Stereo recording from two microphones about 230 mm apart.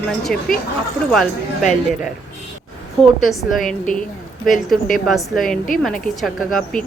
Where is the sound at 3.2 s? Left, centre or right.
Centre.